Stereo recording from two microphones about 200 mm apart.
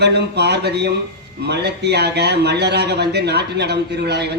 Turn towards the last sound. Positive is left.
turn(degrees=-55)  # may be behind; listen again after turning